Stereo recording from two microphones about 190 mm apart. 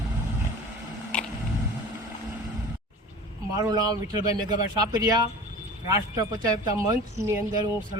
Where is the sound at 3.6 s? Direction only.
20° right (ahead or behind).